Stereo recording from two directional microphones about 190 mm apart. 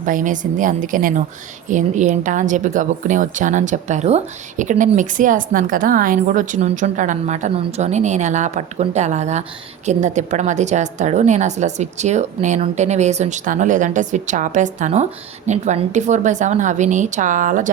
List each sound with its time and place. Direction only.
0.0 s a woman's voice: 45° right (ahead or behind)